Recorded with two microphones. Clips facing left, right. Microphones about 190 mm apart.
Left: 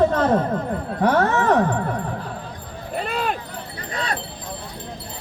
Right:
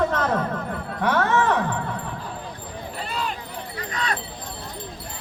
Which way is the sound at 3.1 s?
60° left (ahead or behind).